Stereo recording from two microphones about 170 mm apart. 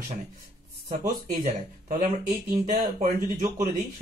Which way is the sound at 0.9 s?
50° right (ahead or behind).